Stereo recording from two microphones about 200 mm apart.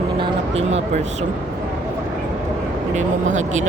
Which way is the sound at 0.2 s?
30° right (ahead or behind).